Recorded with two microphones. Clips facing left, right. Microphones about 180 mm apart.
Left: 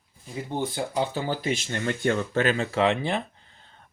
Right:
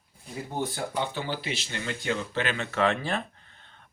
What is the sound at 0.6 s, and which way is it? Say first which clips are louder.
Speech: left 3 dB; 30° left (ahead or behind).